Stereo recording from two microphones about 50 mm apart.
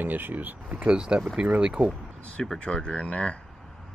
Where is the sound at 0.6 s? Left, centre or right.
Right.